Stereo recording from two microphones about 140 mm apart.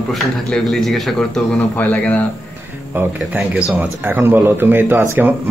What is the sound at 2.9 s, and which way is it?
Speech, 15° right (ahead or behind).